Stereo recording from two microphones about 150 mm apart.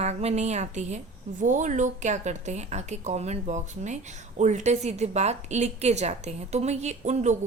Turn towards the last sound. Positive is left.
turn(degrees=-50)  # may be behind; listen again after turning